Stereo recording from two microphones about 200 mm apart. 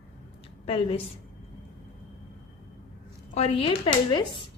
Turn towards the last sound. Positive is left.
turn(degrees=25)  # may be behind; listen again after turning